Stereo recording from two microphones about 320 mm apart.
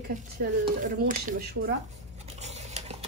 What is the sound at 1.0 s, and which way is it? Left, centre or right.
Speech, right.